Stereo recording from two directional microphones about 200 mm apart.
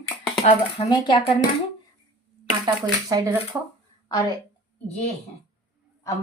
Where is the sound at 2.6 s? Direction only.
20° right (ahead or behind).